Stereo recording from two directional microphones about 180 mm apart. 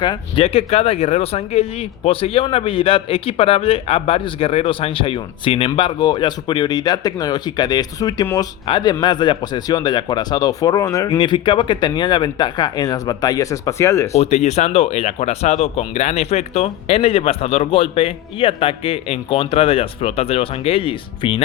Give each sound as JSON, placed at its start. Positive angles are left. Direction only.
{"t": 0.0, "sound": "a man's voice", "side_deg": 25}
{"t": 14.1, "sound": "speech", "side_deg": 35}